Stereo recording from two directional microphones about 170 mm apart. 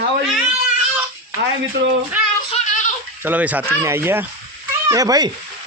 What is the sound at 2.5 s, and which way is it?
Goat, 45° left (ahead or behind).